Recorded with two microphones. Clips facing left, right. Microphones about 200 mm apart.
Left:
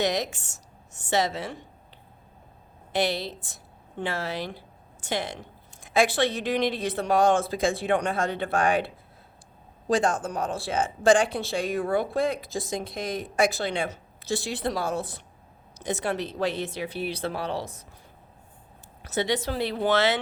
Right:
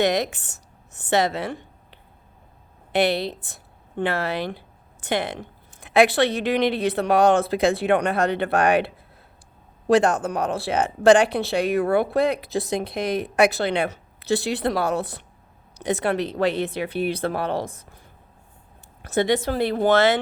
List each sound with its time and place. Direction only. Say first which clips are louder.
0.0 s a woman's voice: right 5 dB; 60° right (ahead or behind)
9.9 s speech: right 6 dB; 65° right (ahead or behind)
19.0 s a woman's voice: right 6 dB; 55° right (ahead or behind)